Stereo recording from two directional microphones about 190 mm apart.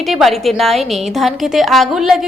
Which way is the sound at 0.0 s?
Centre (ahead or behind).